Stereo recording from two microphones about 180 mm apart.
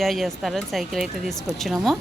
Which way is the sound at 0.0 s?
Centre (ahead or behind).